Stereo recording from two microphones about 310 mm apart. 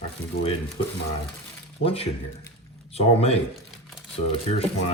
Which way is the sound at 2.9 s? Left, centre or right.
Centre.